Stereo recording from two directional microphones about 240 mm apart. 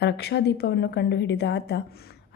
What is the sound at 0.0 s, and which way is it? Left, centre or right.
A woman's voice, left.